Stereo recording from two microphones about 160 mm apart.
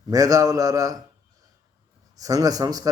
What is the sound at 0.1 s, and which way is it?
Speech, 20° right (ahead or behind).